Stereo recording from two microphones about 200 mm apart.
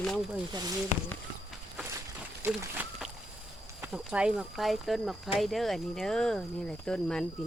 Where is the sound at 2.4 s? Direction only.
10° right (ahead or behind).